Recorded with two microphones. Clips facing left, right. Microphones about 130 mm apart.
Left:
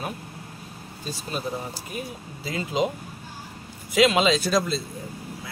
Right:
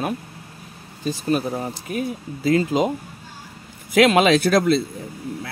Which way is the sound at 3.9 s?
60° right (ahead or behind).